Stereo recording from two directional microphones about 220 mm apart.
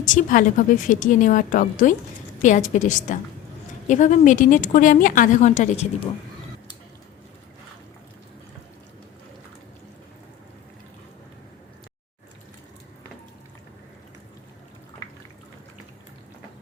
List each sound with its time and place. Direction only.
0.1 s a woman's voice: 35° left (ahead or behind)